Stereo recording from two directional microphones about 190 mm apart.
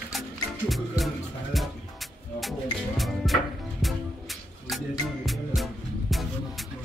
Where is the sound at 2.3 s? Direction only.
Centre (ahead or behind).